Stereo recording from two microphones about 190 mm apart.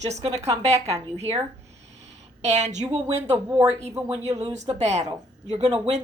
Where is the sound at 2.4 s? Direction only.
35° right (ahead or behind).